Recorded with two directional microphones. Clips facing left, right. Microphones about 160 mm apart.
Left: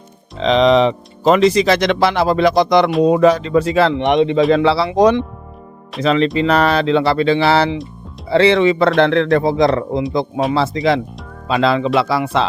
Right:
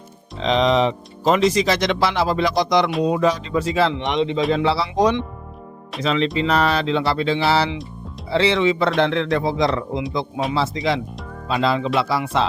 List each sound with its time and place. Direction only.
0.4 s speech: 90° left; by 4.4 s 55° left (ahead or behind)
4.5 s speech: 70° left (ahead or behind)
11.4 s speech: 75° left (ahead or behind)